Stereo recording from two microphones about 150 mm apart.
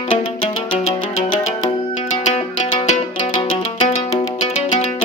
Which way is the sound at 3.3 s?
40° left (ahead or behind).